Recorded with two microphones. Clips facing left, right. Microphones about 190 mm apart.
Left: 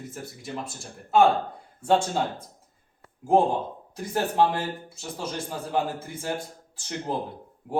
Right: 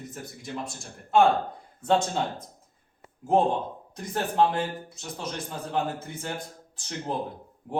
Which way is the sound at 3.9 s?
5° left (ahead or behind).